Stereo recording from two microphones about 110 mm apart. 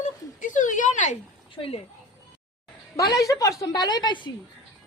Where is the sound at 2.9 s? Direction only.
30° left (ahead or behind).